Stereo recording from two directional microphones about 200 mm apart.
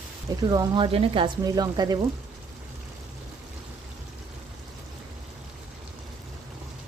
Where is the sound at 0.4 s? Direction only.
20° right (ahead or behind).